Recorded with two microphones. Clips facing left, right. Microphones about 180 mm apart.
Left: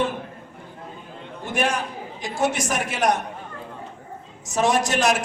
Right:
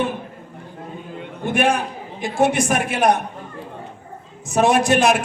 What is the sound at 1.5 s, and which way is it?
A man's voice, 55° right (ahead or behind).